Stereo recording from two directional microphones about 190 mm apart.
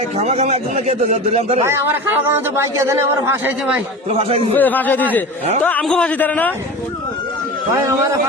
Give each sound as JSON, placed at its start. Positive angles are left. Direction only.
{"t": 0.2, "sound": "a man's voice", "side_deg": -35}
{"t": 1.6, "sound": "a man's voice", "side_deg": -15}
{"t": 4.2, "sound": "a man's voice", "side_deg": -30}
{"t": 4.5, "sound": "a man's voice", "side_deg": 10}
{"t": 7.7, "sound": "a man's voice", "side_deg": -15}